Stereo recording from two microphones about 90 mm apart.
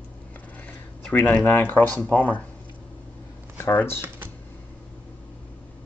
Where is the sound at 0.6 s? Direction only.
20° left (ahead or behind).